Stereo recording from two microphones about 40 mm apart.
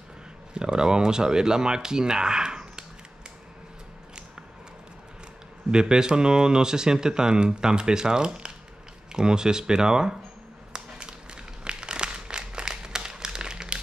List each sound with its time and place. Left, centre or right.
0.6 s speech: centre
5.7 s speech: centre
10.7 s a sound: right